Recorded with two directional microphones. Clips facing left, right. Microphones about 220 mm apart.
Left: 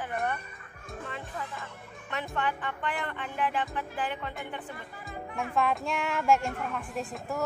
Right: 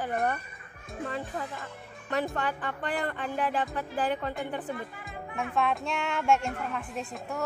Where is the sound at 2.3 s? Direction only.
40° right (ahead or behind).